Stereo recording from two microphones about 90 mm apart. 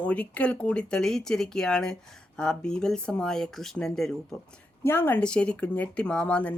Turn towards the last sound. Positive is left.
turn(degrees=15)  # may be behind; listen again after turning